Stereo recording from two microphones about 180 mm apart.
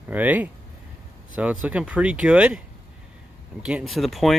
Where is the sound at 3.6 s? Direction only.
5° right (ahead or behind).